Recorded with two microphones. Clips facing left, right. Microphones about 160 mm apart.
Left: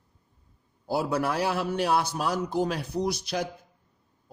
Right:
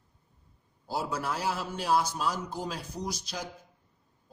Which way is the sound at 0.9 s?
65° left (ahead or behind).